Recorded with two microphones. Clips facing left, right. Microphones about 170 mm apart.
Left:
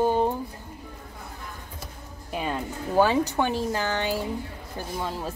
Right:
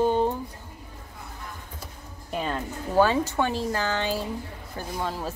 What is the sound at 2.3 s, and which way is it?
Speech, 15° left (ahead or behind).